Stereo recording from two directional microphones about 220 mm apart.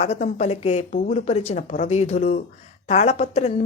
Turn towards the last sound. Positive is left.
turn(degrees=30)  # may be behind; listen again after turning